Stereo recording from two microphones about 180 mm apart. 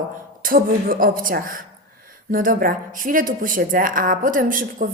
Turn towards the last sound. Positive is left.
turn(degrees=-50)  # may be behind; listen again after turning